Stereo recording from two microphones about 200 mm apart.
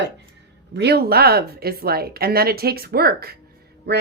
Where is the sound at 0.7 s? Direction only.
55° right (ahead or behind).